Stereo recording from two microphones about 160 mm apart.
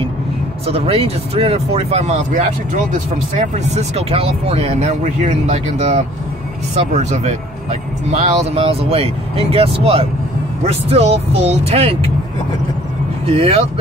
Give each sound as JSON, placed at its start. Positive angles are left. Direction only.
{"t": 0.7, "sound": "speech", "side_deg": -35}
{"t": 13.3, "sound": "speech", "side_deg": -40}